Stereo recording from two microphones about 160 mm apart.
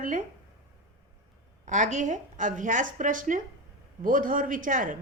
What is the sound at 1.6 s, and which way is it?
A woman's voice, 50° right (ahead or behind).